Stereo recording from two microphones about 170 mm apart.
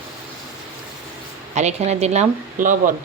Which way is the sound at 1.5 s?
40° right (ahead or behind).